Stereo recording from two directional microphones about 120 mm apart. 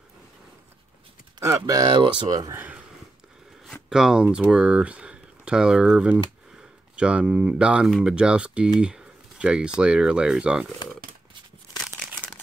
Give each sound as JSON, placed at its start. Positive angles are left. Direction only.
{"t": 1.4, "sound": "speech", "side_deg": -25}
{"t": 2.0, "sound": "speech", "side_deg": -40}
{"t": 2.5, "sound": "speech", "side_deg": -15}
{"t": 3.9, "sound": "speech", "side_deg": -5}
{"t": 8.7, "sound": "a sound", "side_deg": -5}
{"t": 9.8, "sound": "speech", "side_deg": -10}